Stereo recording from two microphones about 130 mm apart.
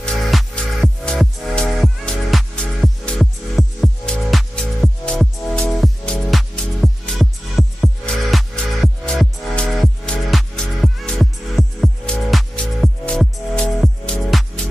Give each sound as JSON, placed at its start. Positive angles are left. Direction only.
{"t": 0.0, "sound": "music", "side_deg": 0}